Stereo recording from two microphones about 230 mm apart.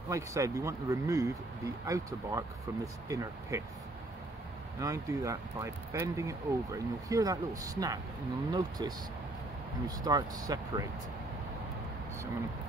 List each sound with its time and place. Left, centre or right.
0.1 s speech: centre
4.7 s speech: centre